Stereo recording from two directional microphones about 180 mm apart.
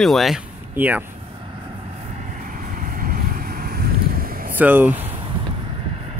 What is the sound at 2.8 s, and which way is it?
Vehicle, 50° right (ahead or behind).